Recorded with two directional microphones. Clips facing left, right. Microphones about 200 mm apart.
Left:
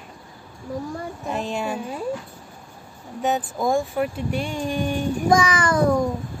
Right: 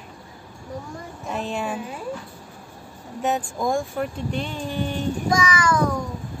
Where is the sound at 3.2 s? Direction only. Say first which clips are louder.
Left 1 dB; centre (ahead or behind).